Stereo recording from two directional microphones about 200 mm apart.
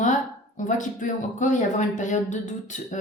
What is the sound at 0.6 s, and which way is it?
A woman's voice, 40° left (ahead or behind).